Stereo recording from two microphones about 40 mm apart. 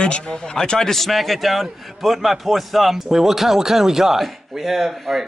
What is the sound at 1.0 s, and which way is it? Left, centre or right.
A man's voice, centre.